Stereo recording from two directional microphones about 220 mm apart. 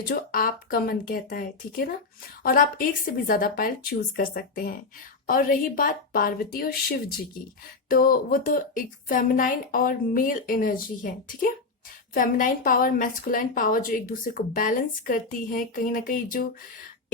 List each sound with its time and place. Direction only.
0.1 s a woman's voice: 40° left (ahead or behind)